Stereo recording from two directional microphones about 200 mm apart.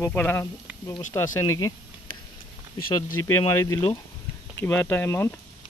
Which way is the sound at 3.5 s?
15° left (ahead or behind).